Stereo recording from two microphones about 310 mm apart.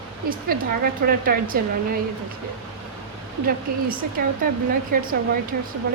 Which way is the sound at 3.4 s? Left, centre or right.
Right.